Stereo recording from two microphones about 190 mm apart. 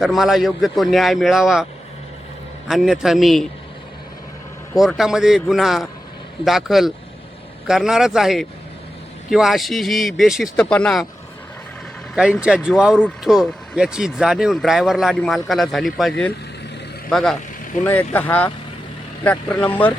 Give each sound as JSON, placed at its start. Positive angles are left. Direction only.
{"t": 0.0, "sound": "speech", "side_deg": 0}
{"t": 2.6, "sound": "speech", "side_deg": 0}
{"t": 4.7, "sound": "speech", "side_deg": 0}
{"t": 12.1, "sound": "speech", "side_deg": -5}